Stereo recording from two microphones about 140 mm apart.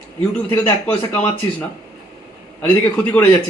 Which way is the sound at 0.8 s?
10° left (ahead or behind).